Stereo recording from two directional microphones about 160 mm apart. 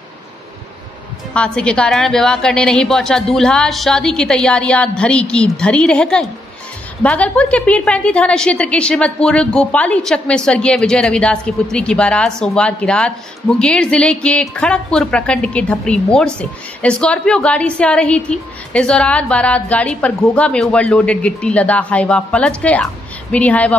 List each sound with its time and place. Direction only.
1.3 s a woman's voice: 5° left (ahead or behind)